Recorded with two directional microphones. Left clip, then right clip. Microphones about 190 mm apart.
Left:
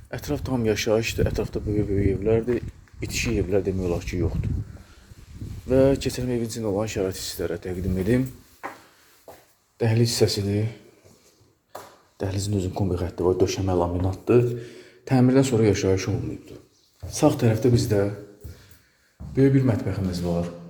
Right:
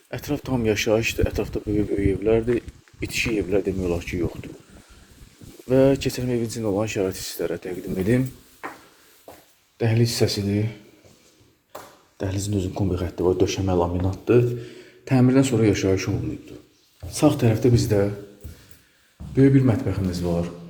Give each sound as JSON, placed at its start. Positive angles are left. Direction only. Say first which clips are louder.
{"t": 0.1, "sound": "speech", "louder": "right 1 dB", "side_deg": -5}
{"t": 5.6, "sound": "speech", "louder": "right 1 dB", "side_deg": -5}
{"t": 9.7, "sound": "a man's voice", "louder": "even", "side_deg": 0}
{"t": 12.7, "sound": "a man's voice", "louder": "right 1 dB", "side_deg": 0}
{"t": 17.1, "sound": "speech", "louder": "right 1 dB", "side_deg": 15}
{"t": 17.4, "sound": "speech", "louder": "right 1 dB", "side_deg": -5}
{"t": 19.4, "sound": "speech", "louder": "right 2 dB", "side_deg": -15}